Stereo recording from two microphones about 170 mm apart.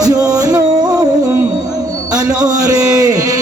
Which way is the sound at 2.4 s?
20° right (ahead or behind).